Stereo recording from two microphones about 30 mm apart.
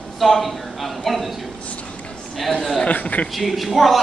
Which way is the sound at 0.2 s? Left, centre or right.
Centre.